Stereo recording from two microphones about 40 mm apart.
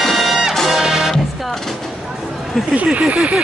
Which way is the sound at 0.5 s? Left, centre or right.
Centre.